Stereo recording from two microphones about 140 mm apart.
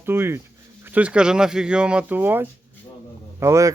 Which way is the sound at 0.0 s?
15° right (ahead or behind).